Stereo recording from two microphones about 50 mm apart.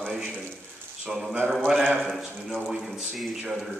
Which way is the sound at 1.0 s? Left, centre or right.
Centre.